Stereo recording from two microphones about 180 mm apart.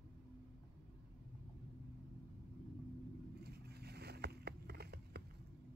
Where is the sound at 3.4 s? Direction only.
65° right (ahead or behind).